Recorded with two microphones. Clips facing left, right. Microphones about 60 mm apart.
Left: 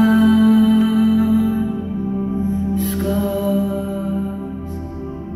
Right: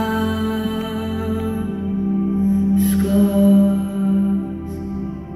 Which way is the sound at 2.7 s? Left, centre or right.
Centre.